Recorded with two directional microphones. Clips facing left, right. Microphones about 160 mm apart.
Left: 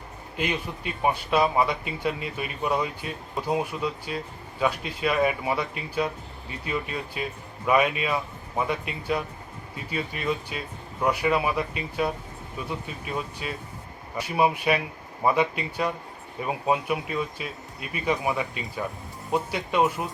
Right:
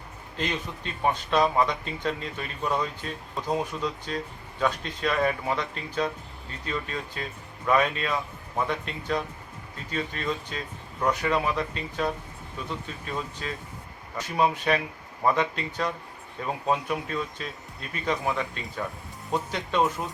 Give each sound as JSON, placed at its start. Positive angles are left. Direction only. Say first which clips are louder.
{"t": 0.3, "sound": "speech", "louder": "left 2 dB", "side_deg": 10}
{"t": 13.4, "sound": "speech", "louder": "left 1 dB", "side_deg": 10}